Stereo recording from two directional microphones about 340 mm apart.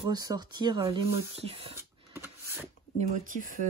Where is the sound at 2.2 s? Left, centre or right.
Centre.